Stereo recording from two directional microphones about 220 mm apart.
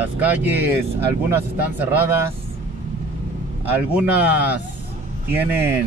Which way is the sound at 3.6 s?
10° right (ahead or behind).